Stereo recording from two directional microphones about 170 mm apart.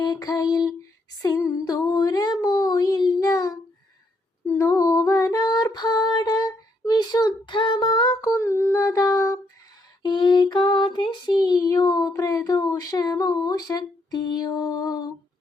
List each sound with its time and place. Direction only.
0.0 s a sound: 25° left (ahead or behind)
2.4 s child singing: 25° left (ahead or behind)
4.4 s female singing: 15° left (ahead or behind)
6.8 s child singing: 25° left (ahead or behind)
12.1 s speech: 20° left (ahead or behind)